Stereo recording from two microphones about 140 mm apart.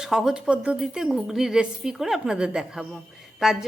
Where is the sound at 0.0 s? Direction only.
5° right (ahead or behind).